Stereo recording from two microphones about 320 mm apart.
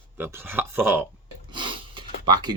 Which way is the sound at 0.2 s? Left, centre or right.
Centre.